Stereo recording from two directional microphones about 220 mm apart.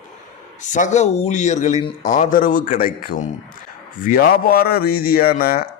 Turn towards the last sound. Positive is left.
turn(degrees=45)  # may be behind; listen again after turning